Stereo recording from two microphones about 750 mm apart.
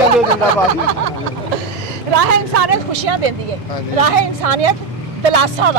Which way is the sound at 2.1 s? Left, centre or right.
Right.